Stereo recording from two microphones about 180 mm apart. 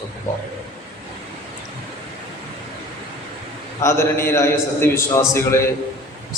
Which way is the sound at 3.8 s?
15° left (ahead or behind).